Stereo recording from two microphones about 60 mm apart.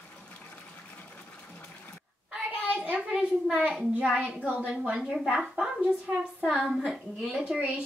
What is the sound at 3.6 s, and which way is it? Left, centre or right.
A child's voice, centre.